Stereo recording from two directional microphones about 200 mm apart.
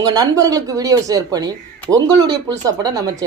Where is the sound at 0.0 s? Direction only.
20° right (ahead or behind).